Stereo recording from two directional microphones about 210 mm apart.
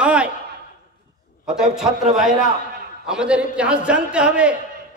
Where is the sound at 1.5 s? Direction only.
5° right (ahead or behind).